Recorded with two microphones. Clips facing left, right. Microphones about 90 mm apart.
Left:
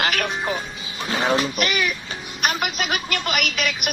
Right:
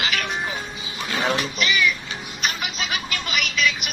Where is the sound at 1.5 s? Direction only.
55° left (ahead or behind).